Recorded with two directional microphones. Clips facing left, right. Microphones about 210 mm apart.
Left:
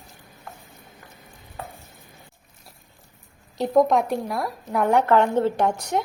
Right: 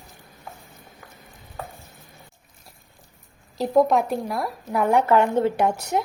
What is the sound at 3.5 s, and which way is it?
A woman's voice, centre (ahead or behind).